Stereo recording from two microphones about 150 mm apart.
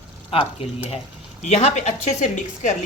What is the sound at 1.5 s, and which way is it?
A woman's voice, 50° left (ahead or behind).